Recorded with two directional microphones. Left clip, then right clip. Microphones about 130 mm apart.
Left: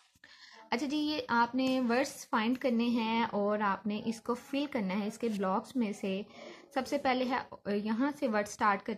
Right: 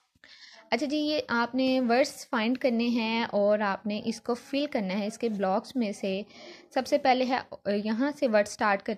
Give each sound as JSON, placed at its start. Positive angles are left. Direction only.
{"t": 0.7, "sound": "a woman's voice", "side_deg": -30}